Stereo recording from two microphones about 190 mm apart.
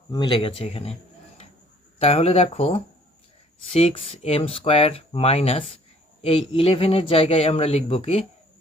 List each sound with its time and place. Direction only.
0.1 s speech: 25° left (ahead or behind)
2.0 s speech: 30° left (ahead or behind)